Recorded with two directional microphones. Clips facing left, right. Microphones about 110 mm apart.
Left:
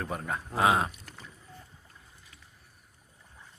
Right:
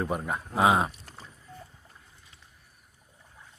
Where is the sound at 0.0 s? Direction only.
15° right (ahead or behind).